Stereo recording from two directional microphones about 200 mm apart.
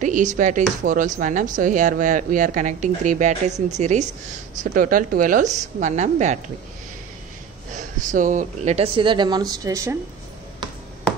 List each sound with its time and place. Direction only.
0.0 s speech: 40° right (ahead or behind)
8.1 s speech: 40° right (ahead or behind); by 9.9 s 15° right (ahead or behind)